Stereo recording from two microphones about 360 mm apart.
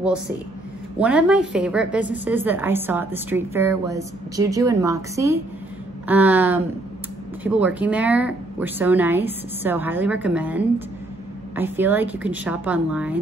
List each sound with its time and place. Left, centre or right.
0.9 s a woman's voice: centre